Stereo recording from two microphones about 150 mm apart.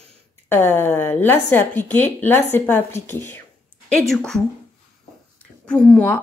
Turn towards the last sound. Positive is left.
turn(degrees=5)  # may be behind; listen again after turning